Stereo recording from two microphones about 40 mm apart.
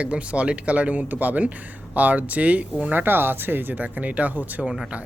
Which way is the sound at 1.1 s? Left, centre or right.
Right.